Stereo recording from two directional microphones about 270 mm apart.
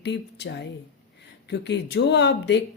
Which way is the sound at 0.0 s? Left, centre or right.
Left.